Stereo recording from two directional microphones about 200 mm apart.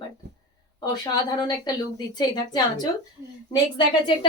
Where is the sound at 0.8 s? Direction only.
20° left (ahead or behind).